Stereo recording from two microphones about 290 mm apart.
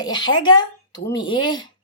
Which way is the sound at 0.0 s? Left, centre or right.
Centre.